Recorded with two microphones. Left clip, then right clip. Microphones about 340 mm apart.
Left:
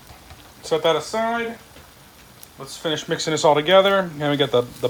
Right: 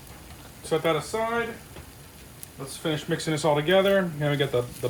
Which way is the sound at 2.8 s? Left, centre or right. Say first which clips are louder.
Left 5 dB; left.